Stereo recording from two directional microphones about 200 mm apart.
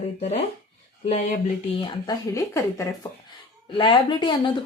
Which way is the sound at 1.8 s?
20° left (ahead or behind).